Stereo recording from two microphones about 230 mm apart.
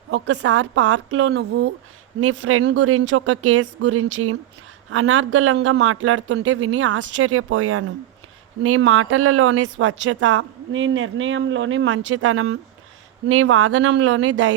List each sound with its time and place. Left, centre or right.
0.1 s speech: right
2.2 s speech: right